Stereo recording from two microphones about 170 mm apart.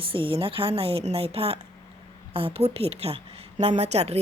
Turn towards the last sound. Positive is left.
turn(degrees=-40)  # may be behind; listen again after turning